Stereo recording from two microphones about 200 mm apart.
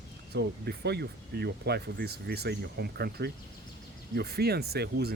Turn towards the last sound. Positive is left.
turn(degrees=-50)  # may be behind; listen again after turning